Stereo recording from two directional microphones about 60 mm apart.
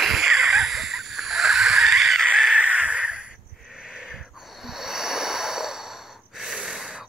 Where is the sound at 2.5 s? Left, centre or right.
Right.